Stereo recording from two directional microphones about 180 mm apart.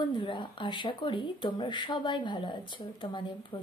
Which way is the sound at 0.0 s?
25° left (ahead or behind).